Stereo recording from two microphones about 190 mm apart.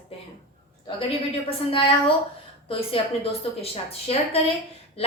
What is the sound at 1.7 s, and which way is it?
A woman's voice, 30° left (ahead or behind).